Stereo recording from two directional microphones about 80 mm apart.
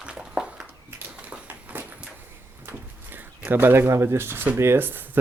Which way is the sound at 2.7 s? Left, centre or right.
Right.